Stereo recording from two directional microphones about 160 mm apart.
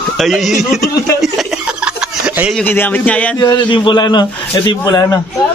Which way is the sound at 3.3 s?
25° left (ahead or behind).